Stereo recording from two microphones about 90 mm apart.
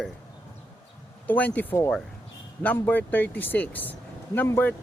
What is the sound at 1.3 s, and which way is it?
Speech, 20° left (ahead or behind).